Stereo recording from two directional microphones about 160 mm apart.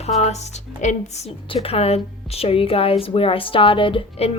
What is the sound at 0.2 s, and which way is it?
A woman's voice, 45° left (ahead or behind).